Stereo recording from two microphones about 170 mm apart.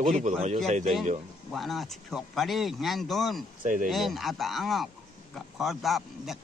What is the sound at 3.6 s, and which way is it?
Speech, 50° right (ahead or behind).